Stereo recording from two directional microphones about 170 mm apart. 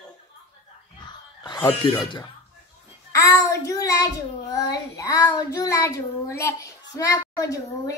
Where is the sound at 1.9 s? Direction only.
25° left (ahead or behind).